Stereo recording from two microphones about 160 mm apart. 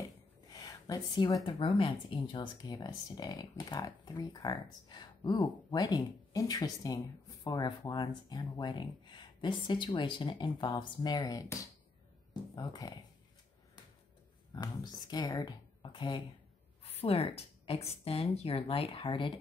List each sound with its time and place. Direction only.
0.5 s a woman's voice: 25° left (ahead or behind)
12.5 s a woman's voice: 20° left (ahead or behind)
14.5 s a woman's voice: 25° left (ahead or behind)